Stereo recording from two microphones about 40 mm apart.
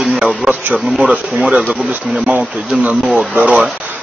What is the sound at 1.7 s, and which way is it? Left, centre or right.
Speech, right.